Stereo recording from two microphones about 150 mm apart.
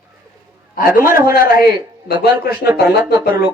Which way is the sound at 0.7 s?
70° left (ahead or behind).